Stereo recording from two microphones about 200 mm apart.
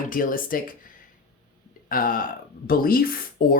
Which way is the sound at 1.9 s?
45° left (ahead or behind).